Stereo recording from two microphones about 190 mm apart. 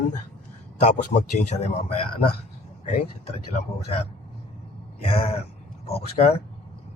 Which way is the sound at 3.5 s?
35° left (ahead or behind).